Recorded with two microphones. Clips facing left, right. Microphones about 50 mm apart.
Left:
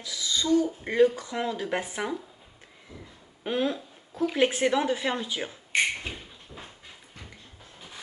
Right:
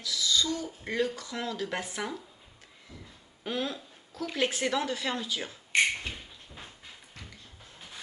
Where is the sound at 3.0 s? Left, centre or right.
Left.